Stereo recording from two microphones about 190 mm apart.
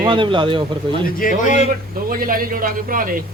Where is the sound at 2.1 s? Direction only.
50° right (ahead or behind).